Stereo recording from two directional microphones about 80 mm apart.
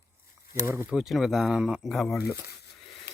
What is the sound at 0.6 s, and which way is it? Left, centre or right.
Speech, right.